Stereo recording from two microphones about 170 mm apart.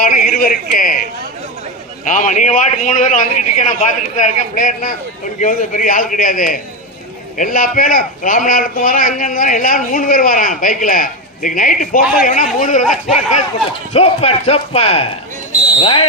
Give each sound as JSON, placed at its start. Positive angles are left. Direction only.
{"t": 0.0, "sound": "a man's voice", "side_deg": 55}
{"t": 2.0, "sound": "a man's voice", "side_deg": 50}
{"t": 13.9, "sound": "speech", "side_deg": 35}